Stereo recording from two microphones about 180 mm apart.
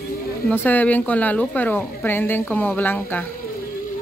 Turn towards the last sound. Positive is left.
turn(degrees=10)  # may be behind; listen again after turning